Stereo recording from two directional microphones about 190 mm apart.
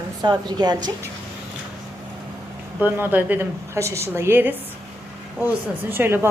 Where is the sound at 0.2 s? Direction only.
20° right (ahead or behind).